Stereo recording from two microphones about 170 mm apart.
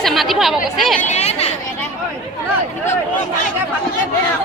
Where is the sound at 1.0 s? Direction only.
40° left (ahead or behind).